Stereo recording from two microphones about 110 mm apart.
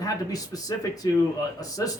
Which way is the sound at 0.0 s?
35° left (ahead or behind).